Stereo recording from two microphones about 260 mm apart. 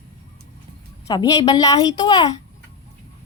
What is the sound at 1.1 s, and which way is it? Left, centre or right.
A woman's voice, centre.